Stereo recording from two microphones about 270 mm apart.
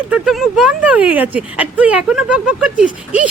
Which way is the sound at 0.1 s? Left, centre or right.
Centre.